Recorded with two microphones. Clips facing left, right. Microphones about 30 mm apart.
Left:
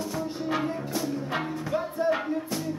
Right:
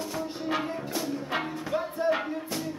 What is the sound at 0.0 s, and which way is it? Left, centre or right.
Music, right.